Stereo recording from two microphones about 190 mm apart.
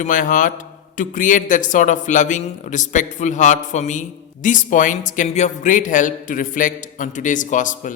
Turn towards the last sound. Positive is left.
turn(degrees=40)  # may be behind; listen again after turning